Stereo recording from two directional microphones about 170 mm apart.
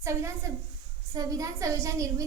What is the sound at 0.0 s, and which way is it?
A woman's voice, 15° right (ahead or behind).